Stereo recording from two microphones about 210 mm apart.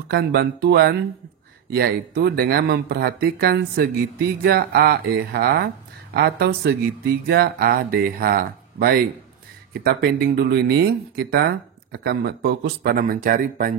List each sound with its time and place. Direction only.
0.1 s speech: 50° right (ahead or behind)